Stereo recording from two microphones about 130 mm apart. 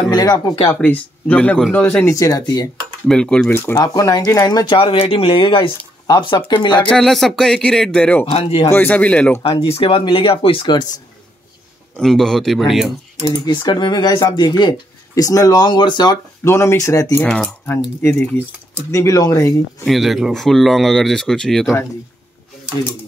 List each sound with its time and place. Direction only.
0.1 s speech: 30° left (ahead or behind)
0.7 s speech: 10° left (ahead or behind)
2.1 s speech: 25° left (ahead or behind)
3.1 s speech: 5° left (ahead or behind)
3.8 s speech: 25° left (ahead or behind)
6.9 s speech: centre (ahead or behind)
8.3 s speech: 50° left (ahead or behind)
8.7 s speech: 15° left (ahead or behind)
9.6 s speech: 45° left (ahead or behind)
12.0 s speech: 5° left (ahead or behind)
13.3 s speech: 35° left (ahead or behind)
16.4 s speech: 20° left (ahead or behind)
17.2 s speech: 10° left (ahead or behind); by 19.5 s 25° left (ahead or behind)
19.8 s speech: centre (ahead or behind)